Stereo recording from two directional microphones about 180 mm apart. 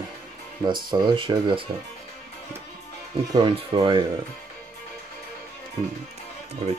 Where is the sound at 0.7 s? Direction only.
25° right (ahead or behind).